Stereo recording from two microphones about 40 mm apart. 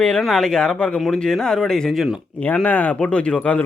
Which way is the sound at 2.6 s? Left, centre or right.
Left.